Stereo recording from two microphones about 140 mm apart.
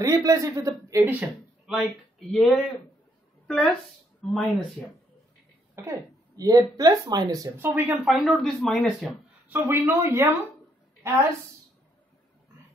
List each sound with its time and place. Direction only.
0.0 s a man's voice: 25° right (ahead or behind)
1.0 s a woman's voice: 5° right (ahead or behind)
5.8 s speech: 25° right (ahead or behind)
8.0 s speech: centre (ahead or behind)
9.5 s a woman's voice: 15° right (ahead or behind)